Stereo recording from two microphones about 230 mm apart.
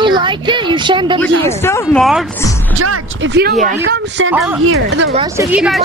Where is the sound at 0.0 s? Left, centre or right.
Centre.